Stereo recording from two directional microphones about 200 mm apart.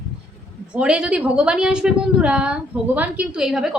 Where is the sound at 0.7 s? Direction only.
5° right (ahead or behind).